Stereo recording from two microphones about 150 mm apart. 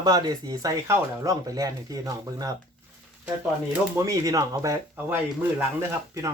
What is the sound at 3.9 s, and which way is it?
Speech, 20° right (ahead or behind).